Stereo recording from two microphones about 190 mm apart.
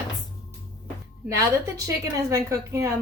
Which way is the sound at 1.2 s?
15° right (ahead or behind).